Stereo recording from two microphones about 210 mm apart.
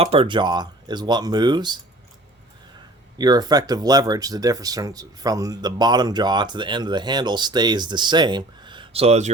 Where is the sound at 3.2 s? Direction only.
20° right (ahead or behind).